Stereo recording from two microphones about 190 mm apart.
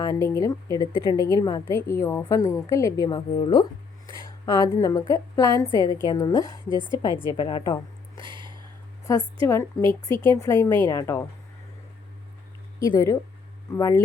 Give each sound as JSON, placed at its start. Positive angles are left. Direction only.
{"t": 0.0, "sound": "a woman's voice", "side_deg": 15}
{"t": 6.7, "sound": "a woman's voice", "side_deg": -25}
{"t": 7.3, "sound": "speech", "side_deg": 25}
{"t": 8.2, "sound": "a sound", "side_deg": -25}
{"t": 9.0, "sound": "a woman's voice", "side_deg": 20}
{"t": 12.9, "sound": "a woman's voice", "side_deg": 15}